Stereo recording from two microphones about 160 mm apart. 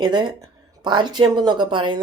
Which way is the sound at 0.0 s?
25° right (ahead or behind).